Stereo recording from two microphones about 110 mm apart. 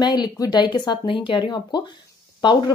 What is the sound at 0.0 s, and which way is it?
Speech, 40° left (ahead or behind).